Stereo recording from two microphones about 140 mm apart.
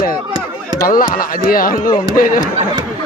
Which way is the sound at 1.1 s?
90° left.